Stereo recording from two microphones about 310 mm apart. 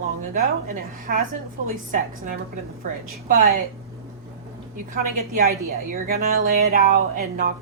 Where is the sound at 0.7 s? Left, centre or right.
Right.